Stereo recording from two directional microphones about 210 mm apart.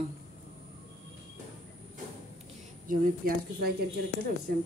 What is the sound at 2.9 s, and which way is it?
Speech, 40° right (ahead or behind).